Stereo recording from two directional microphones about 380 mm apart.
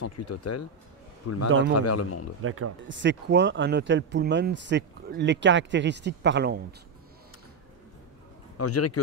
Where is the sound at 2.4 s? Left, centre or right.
Right.